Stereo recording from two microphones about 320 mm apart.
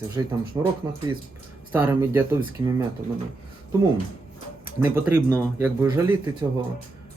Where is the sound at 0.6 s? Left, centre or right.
Centre.